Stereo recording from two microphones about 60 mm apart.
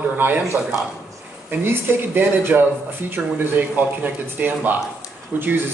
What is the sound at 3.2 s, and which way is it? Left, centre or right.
Speech, centre.